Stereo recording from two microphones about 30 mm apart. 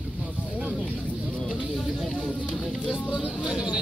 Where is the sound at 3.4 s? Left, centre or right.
Right.